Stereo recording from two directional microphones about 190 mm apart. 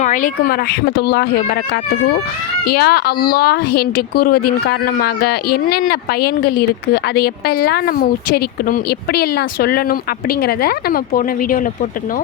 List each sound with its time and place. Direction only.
0.0 s speech: 40° left (ahead or behind)